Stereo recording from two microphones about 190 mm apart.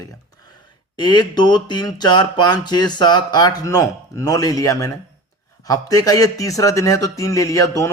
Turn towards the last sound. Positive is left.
turn(degrees=15)  # may be behind; listen again after turning